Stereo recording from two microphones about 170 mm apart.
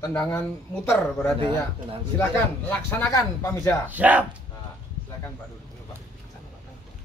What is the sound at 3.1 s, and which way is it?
Speech, 20° left (ahead or behind).